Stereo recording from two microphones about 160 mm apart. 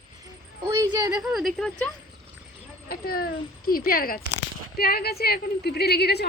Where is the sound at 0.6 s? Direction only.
20° right (ahead or behind).